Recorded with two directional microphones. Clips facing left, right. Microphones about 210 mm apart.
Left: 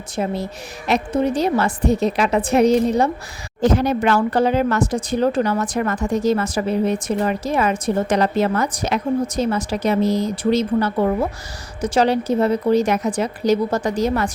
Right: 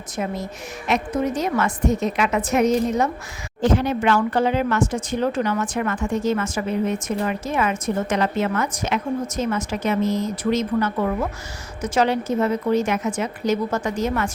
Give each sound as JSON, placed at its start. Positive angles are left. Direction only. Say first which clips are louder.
{"t": 0.2, "sound": "speech", "louder": "left 4 dB", "side_deg": 30}